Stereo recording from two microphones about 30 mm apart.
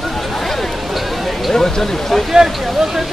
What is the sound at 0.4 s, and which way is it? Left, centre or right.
Chatter, centre.